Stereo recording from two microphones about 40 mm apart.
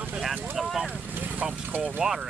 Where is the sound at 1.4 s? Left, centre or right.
Right.